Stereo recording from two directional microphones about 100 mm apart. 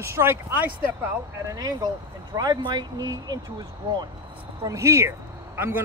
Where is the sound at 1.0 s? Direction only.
35° right (ahead or behind).